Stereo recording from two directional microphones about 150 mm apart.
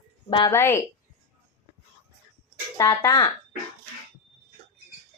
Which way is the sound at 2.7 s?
20° left (ahead or behind).